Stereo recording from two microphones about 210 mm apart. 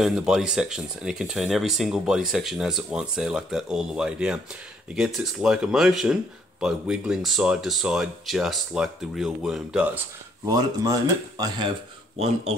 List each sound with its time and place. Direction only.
0.0 s speech: centre (ahead or behind)
10.4 s speech: 15° right (ahead or behind)